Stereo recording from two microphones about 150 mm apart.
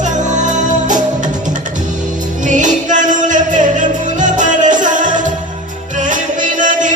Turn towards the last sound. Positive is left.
turn(degrees=-60)  # may be behind; listen again after turning